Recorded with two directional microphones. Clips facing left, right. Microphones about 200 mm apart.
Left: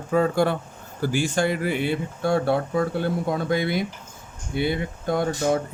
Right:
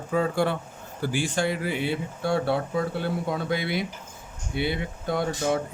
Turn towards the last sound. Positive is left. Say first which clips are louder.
# left 3 dB
turn(degrees=45)  # may be behind; listen again after turning